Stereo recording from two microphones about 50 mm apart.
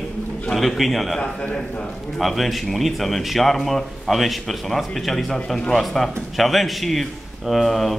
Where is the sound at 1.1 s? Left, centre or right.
Centre.